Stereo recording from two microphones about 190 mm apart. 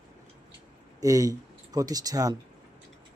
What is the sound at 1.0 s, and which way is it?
Speech, 20° right (ahead or behind).